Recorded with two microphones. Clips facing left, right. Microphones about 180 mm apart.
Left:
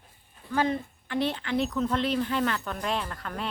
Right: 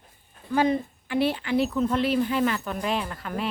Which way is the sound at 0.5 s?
15° right (ahead or behind).